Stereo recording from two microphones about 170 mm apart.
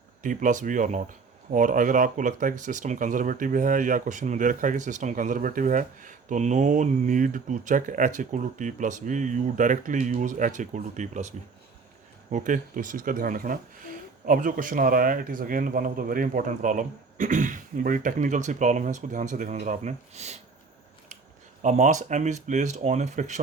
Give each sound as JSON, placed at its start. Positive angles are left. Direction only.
{"t": 0.2, "sound": "speech", "side_deg": -50}
{"t": 21.6, "sound": "speech", "side_deg": -45}